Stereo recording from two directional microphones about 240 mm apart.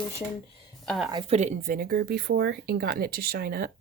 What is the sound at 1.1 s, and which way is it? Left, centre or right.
Speech, right.